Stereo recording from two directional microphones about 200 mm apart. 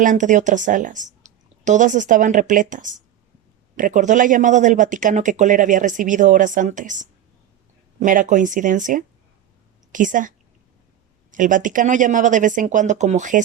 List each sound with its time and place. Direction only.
0.0 s speech: 40° right (ahead or behind)